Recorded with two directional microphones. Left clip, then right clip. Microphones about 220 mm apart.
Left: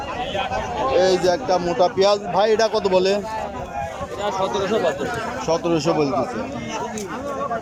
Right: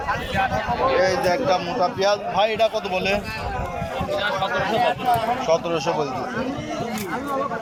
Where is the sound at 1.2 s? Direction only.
20° left (ahead or behind).